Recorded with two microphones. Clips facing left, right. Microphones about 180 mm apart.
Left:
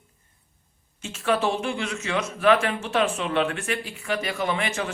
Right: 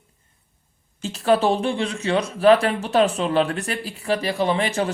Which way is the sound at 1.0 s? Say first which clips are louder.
Right 5 dB; 35° right (ahead or behind).